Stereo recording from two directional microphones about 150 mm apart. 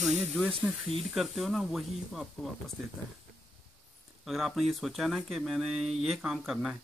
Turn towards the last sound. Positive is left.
turn(degrees=-5)  # may be behind; listen again after turning